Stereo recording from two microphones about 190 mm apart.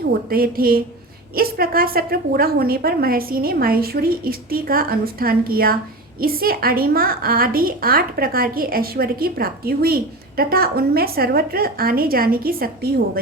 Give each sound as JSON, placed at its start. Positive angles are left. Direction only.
{"t": 0.1, "sound": "a woman's voice", "side_deg": -50}